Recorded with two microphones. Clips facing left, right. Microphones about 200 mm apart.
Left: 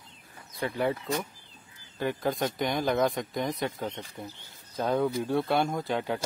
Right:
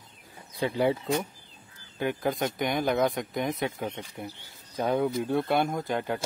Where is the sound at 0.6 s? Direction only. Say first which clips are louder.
Right 3 dB; 15° right (ahead or behind).